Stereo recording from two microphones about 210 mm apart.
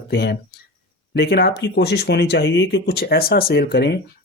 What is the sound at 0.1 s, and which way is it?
Speech, 50° left (ahead or behind).